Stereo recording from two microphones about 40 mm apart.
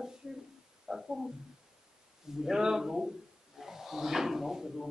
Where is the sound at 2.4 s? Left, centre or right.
Centre.